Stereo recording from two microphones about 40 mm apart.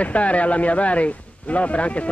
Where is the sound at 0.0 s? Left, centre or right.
Left.